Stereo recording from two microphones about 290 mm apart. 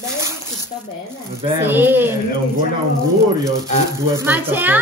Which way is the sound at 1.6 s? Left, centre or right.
Centre.